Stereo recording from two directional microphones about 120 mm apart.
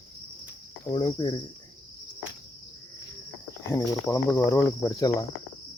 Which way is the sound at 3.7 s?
25° left (ahead or behind).